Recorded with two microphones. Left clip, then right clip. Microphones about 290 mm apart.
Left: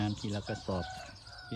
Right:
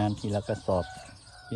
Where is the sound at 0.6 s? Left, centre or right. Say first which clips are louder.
Right 10 dB; right.